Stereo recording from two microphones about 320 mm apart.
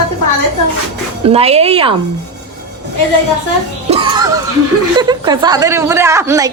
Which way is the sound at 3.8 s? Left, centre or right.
Centre.